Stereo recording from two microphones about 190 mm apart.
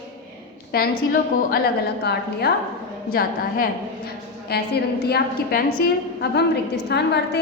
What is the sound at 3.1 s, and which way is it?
A woman's voice, 50° left (ahead or behind).